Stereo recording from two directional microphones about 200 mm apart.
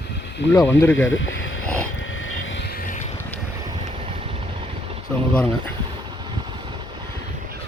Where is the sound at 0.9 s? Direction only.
70° left (ahead or behind).